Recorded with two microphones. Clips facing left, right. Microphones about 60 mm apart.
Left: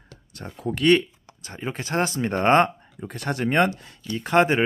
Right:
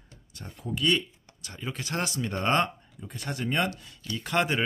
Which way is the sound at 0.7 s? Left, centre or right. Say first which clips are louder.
Left 8 dB; left.